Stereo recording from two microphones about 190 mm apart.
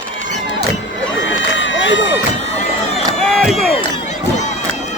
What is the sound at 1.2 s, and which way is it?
Run, 80° left.